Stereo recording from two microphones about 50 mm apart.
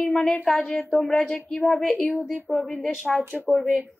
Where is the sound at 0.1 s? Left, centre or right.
Centre.